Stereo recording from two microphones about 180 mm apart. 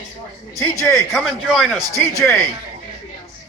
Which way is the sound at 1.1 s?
Centre (ahead or behind).